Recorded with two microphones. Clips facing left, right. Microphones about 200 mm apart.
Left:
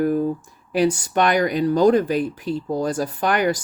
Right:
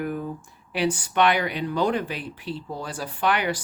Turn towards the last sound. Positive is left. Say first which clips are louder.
# left 4 dB
turn(degrees=45)  # may be behind; listen again after turning